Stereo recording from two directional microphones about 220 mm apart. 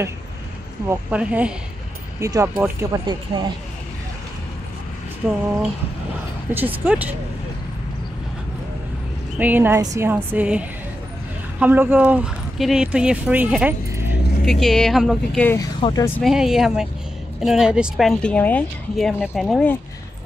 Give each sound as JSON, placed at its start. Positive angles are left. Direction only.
{"t": 0.8, "sound": "a woman's voice", "side_deg": -5}
{"t": 5.2, "sound": "speech", "side_deg": -5}
{"t": 6.5, "sound": "a woman's voice", "side_deg": -10}
{"t": 9.4, "sound": "a woman's voice", "side_deg": -10}
{"t": 14.4, "sound": "speech", "side_deg": 0}
{"t": 16.2, "sound": "speech", "side_deg": 0}